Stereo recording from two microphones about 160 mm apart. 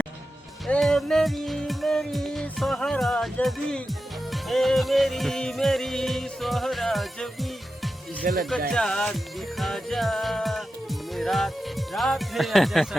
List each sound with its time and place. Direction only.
0.7 s music: centre (ahead or behind)
8.2 s music: 60° right (ahead or behind)
8.7 s music: 5° left (ahead or behind)